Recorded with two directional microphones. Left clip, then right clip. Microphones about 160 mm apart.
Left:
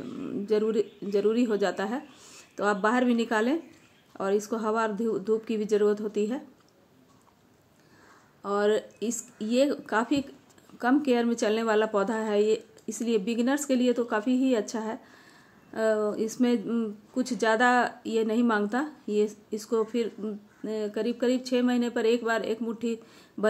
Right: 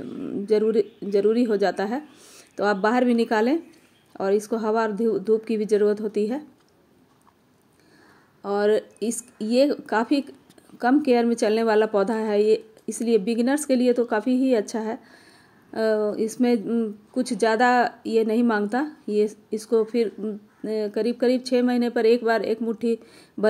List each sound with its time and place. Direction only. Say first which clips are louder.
0.0 s speech: right 4 dB; 20° right (ahead or behind)
8.4 s speech: right 4 dB; 20° right (ahead or behind)
16.1 s speech: right 4 dB; 20° right (ahead or behind)